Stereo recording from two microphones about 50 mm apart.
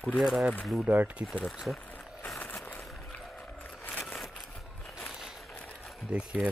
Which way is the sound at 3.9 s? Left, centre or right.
Left.